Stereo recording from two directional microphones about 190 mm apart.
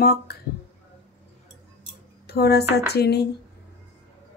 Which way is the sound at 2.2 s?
55° left (ahead or behind).